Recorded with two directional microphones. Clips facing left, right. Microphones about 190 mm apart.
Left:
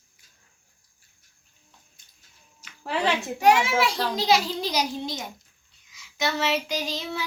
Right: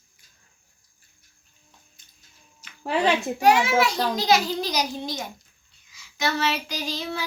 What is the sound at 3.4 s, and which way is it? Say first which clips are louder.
Child singing: right 1 dB; 30° left (ahead or behind).